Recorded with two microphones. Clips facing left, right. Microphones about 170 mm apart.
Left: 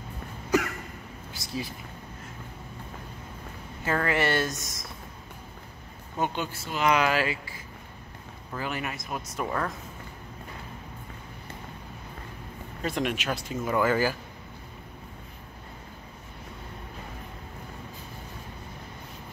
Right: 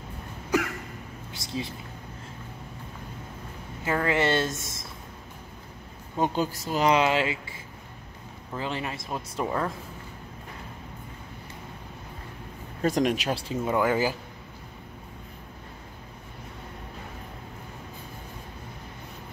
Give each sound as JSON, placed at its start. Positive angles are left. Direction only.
{"t": 0.5, "sound": "a sound", "side_deg": -10}
{"t": 3.8, "sound": "speech", "side_deg": -20}
{"t": 6.1, "sound": "speech", "side_deg": -35}
{"t": 8.5, "sound": "speech", "side_deg": -25}
{"t": 12.8, "sound": "speech", "side_deg": -40}
{"t": 13.7, "sound": "speech", "side_deg": -15}